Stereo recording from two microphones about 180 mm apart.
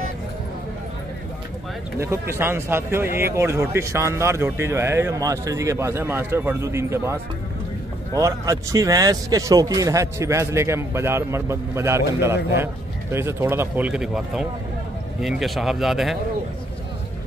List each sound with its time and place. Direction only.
2.0 s a man's voice: 15° right (ahead or behind)